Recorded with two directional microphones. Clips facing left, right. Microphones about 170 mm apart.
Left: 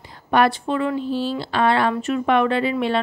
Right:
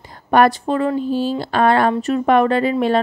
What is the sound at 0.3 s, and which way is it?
Speech, 45° right (ahead or behind).